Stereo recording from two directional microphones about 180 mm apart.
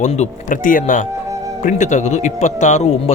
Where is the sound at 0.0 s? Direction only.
40° left (ahead or behind).